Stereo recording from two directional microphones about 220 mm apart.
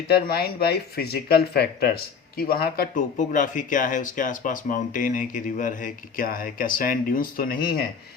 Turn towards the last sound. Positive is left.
turn(degrees=40)  # may be behind; listen again after turning